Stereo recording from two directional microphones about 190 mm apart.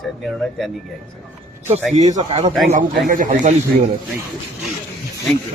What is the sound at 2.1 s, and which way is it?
A man's voice, 35° right (ahead or behind).